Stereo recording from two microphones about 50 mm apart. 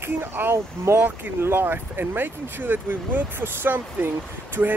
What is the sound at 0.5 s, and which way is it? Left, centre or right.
Speech, right.